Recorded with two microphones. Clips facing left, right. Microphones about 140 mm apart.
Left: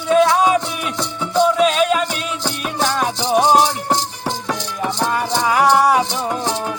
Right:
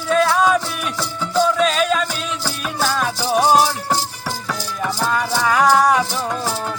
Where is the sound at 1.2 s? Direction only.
20° left (ahead or behind).